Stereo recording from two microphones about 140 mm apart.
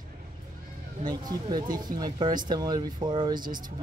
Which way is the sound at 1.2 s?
30° right (ahead or behind).